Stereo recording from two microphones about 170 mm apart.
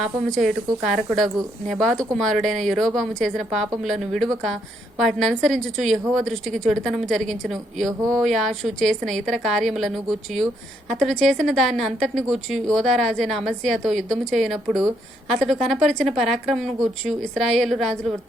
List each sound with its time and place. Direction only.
0.3 s speech: centre (ahead or behind)